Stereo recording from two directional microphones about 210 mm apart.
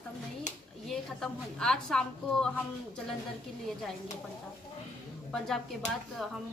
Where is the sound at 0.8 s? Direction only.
Centre (ahead or behind).